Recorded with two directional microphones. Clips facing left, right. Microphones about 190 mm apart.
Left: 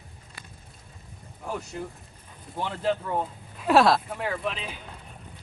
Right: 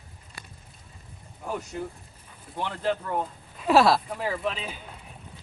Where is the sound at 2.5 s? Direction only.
Centre (ahead or behind).